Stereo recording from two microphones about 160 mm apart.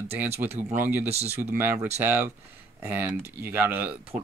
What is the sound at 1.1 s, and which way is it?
Speech, 40° right (ahead or behind).